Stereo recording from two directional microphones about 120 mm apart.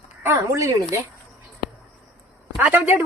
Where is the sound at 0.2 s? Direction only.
25° right (ahead or behind).